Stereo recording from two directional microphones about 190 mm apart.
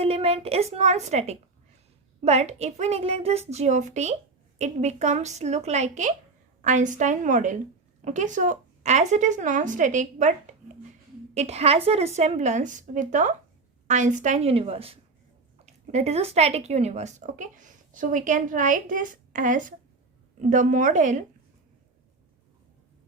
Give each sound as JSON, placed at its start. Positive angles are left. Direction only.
{"t": 0.0, "sound": "speech", "side_deg": -30}
{"t": 11.3, "sound": "speech", "side_deg": -35}